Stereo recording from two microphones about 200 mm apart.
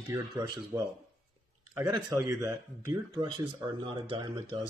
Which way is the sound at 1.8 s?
20° right (ahead or behind).